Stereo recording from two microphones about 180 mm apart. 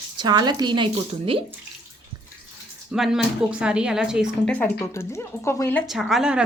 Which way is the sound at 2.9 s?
Centre (ahead or behind).